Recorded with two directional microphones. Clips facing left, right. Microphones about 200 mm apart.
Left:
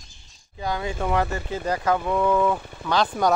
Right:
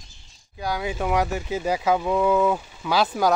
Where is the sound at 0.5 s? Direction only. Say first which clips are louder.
Even; 10° right (ahead or behind).